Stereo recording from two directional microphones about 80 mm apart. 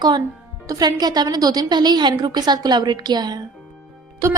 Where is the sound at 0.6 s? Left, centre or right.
Right.